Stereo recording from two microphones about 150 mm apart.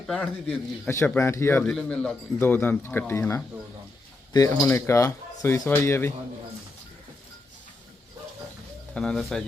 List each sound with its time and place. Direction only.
0.1 s speech: 5° left (ahead or behind)
1.7 s speech: 5° left (ahead or behind)
8.9 s speech: 5° left (ahead or behind)